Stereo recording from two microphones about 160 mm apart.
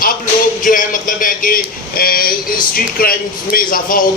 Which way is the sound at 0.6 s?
55° left (ahead or behind).